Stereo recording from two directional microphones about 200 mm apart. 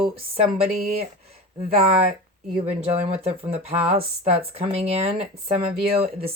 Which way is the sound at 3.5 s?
30° right (ahead or behind).